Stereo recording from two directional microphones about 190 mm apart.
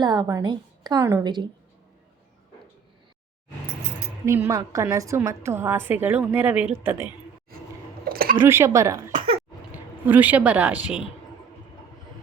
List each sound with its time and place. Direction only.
0.0 s a woman's voice: 20° right (ahead or behind)
4.3 s a woman's voice: 15° right (ahead or behind)
8.0 s a sound: 50° right (ahead or behind)
8.4 s a woman's voice: 15° right (ahead or behind)